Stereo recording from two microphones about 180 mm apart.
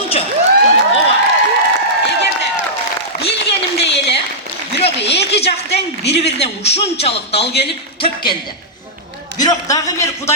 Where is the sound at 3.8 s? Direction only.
75° left (ahead or behind).